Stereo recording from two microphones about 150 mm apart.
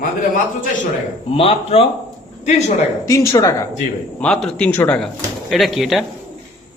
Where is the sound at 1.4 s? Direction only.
40° left (ahead or behind).